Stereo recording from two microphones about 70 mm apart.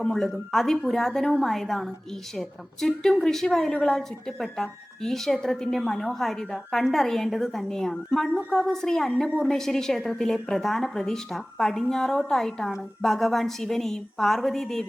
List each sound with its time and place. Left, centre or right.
0.0 s a woman's voice: centre